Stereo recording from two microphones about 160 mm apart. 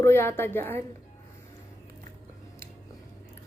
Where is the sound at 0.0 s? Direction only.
15° left (ahead or behind).